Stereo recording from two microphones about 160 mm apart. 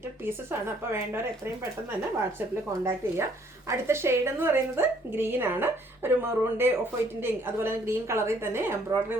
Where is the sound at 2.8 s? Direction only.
15° right (ahead or behind).